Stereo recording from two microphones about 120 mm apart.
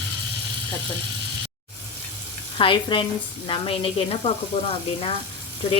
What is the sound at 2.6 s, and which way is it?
Speech, 45° left (ahead or behind).